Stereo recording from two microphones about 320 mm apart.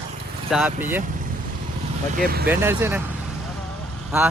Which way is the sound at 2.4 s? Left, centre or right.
Centre.